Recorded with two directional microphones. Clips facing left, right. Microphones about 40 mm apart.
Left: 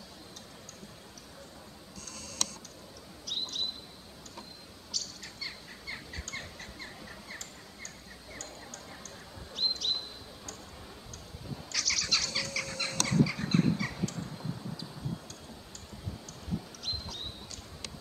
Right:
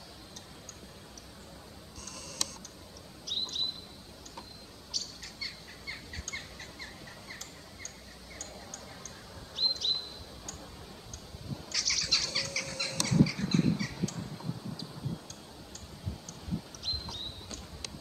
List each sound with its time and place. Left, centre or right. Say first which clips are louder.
2.0 s tick: left 1 dB; centre
3.3 s chirp: right 1 dB; centre
4.9 s bird: even; centre
5.4 s fowl: even; centre
8.4 s a sound: even; centre
11.7 s bird: left 1 dB; centre
13.4 s a sound: left 1 dB; centre
13.9 s cat: even; centre
16.8 s a sound: even; centre